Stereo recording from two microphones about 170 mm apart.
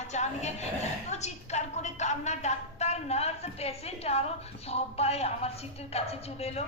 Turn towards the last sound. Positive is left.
turn(degrees=35)  # may be behind; listen again after turning